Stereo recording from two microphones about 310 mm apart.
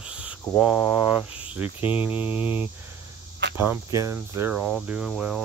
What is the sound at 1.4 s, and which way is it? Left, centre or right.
Speech, centre.